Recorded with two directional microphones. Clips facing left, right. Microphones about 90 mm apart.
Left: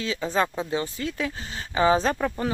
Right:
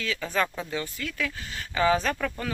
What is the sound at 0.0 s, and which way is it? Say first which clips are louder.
Speech: left 3 dB; 25° left (ahead or behind).